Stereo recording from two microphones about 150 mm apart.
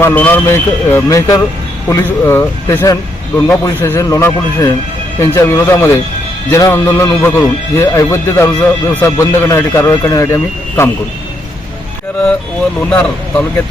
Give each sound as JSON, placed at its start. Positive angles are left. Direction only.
{"t": 0.0, "sound": "speech", "side_deg": 15}